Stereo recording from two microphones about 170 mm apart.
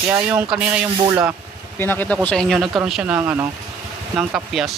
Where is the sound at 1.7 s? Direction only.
10° left (ahead or behind).